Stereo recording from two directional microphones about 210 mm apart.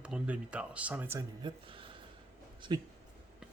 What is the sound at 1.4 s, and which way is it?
Speech, 25° right (ahead or behind).